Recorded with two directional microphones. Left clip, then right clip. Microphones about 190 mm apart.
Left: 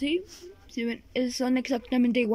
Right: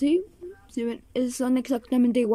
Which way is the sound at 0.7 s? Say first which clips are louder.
Right 2 dB; 15° right (ahead or behind).